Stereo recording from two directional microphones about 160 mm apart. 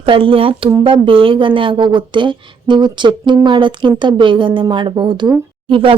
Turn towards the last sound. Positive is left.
turn(degrees=-35)  # may be behind; listen again after turning